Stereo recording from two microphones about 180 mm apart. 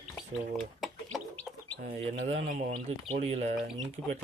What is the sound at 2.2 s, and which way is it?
Speech, 40° right (ahead or behind).